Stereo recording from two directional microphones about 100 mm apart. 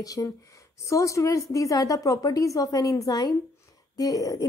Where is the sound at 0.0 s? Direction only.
35° left (ahead or behind).